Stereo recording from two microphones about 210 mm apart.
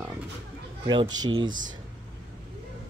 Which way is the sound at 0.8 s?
20° right (ahead or behind).